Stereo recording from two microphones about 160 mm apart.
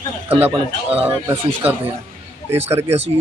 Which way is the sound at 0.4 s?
35° right (ahead or behind).